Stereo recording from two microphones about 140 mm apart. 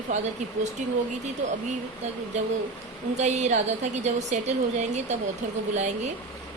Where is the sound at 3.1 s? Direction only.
55° right (ahead or behind).